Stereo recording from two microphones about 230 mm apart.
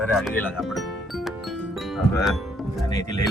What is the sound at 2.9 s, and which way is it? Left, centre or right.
Speech, centre.